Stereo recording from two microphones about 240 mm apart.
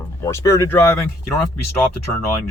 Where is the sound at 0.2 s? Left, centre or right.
Centre.